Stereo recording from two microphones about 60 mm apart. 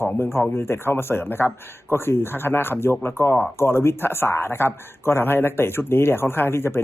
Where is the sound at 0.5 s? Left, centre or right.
Left.